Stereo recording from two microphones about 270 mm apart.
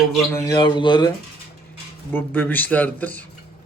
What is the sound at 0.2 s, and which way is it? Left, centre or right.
Speech, centre.